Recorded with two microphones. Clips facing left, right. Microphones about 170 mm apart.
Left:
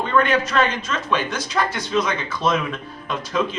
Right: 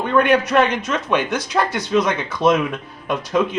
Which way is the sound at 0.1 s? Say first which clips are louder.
Right 5 dB; 15° right (ahead or behind).